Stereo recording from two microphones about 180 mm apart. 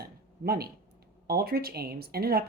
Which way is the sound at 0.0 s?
60° right (ahead or behind).